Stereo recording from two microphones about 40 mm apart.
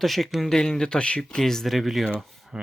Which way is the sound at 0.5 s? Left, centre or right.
Centre.